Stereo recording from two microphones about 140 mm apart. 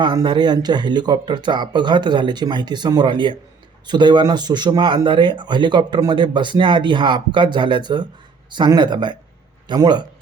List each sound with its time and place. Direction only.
0.0 s speech: 30° right (ahead or behind)